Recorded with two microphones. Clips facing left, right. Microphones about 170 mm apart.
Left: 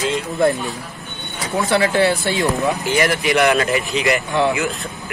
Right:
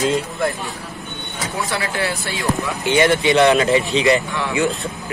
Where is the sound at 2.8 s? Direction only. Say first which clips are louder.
Right 8 dB; 25° right (ahead or behind).